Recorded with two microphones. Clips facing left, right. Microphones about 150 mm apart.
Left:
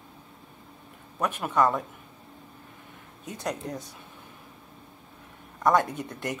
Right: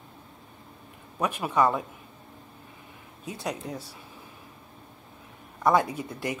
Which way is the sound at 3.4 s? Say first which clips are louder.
Left 1 dB; 5° right (ahead or behind).